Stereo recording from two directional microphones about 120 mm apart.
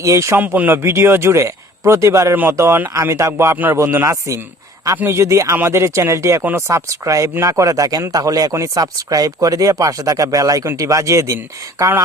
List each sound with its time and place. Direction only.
0.0 s speech: 25° right (ahead or behind)